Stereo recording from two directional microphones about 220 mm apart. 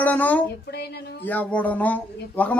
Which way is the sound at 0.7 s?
50° left (ahead or behind).